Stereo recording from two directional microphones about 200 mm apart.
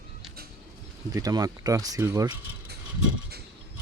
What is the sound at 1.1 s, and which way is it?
Speech, 20° right (ahead or behind).